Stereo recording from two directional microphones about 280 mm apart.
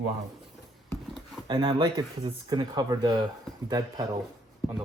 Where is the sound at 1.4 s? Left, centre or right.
Centre.